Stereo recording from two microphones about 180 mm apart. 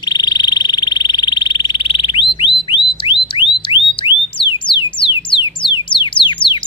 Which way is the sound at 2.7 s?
30° left (ahead or behind).